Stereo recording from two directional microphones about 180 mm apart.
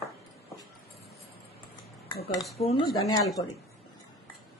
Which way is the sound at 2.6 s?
30° left (ahead or behind).